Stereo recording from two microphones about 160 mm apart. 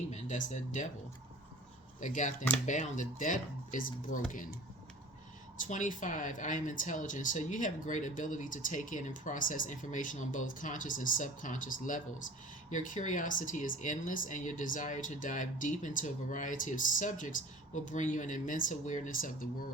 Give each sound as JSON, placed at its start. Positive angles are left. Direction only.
{"t": 0.1, "sound": "speech", "side_deg": 50}
{"t": 2.0, "sound": "speech", "side_deg": 50}
{"t": 5.6, "sound": "speech", "side_deg": 50}